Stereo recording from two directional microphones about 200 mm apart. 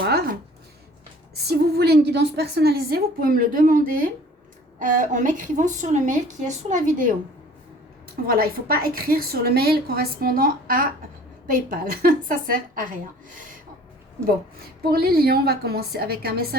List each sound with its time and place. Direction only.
0.0 s a sound: 45° right (ahead or behind)
1.4 s a woman's voice: 55° right (ahead or behind)
8.3 s a woman's voice: 50° right (ahead or behind)
14.8 s a woman's voice: 50° right (ahead or behind)